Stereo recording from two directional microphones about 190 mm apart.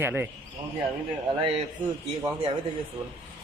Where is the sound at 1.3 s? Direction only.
30° right (ahead or behind).